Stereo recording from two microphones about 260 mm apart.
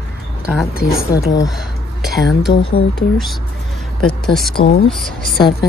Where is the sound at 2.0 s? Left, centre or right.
Centre.